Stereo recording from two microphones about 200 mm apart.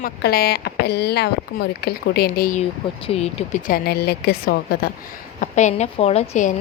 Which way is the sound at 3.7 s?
50° left (ahead or behind).